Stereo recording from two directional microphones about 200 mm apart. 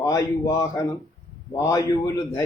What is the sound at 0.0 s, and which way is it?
A man's voice, 15° left (ahead or behind).